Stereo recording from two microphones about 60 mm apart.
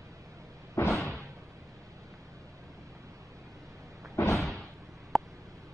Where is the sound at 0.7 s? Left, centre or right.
Left.